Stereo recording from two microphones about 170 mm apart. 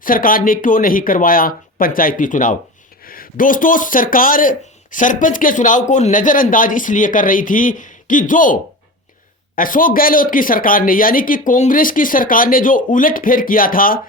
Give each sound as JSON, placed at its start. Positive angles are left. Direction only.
{"t": 0.0, "sound": "speech", "side_deg": 55}
{"t": 9.6, "sound": "speech", "side_deg": 50}